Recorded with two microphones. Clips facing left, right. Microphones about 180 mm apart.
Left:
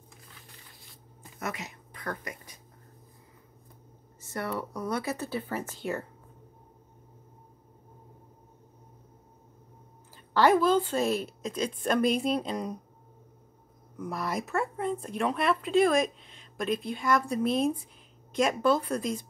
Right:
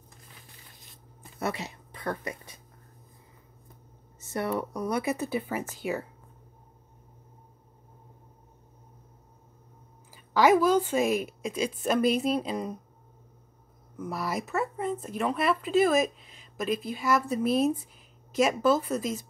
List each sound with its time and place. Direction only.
1.4 s speech: 30° right (ahead or behind)
4.2 s a woman's voice: 25° right (ahead or behind)
10.1 s a woman's voice: 10° right (ahead or behind)
13.9 s speech: centre (ahead or behind)